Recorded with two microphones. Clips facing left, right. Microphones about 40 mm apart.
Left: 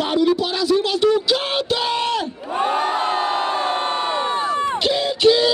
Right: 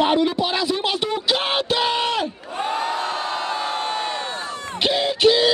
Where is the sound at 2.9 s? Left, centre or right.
Left.